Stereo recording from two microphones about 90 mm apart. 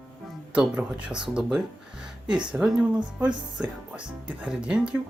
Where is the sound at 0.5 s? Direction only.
10° right (ahead or behind).